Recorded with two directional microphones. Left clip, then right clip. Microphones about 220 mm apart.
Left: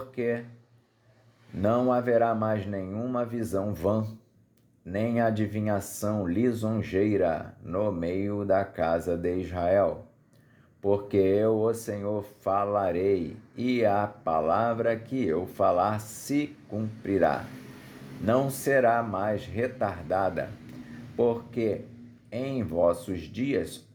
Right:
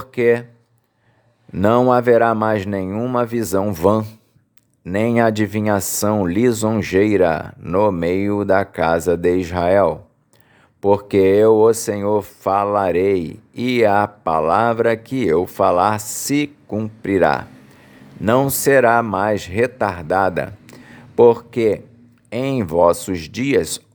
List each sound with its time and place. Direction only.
0.1 s speech: 35° right (ahead or behind)
1.6 s speech: 35° right (ahead or behind)